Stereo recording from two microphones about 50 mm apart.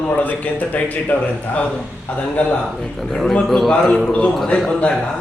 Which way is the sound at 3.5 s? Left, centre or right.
Centre.